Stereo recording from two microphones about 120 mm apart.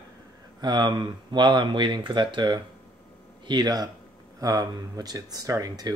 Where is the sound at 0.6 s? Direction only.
40° right (ahead or behind).